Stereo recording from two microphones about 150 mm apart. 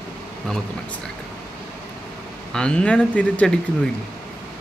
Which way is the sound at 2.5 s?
5° left (ahead or behind).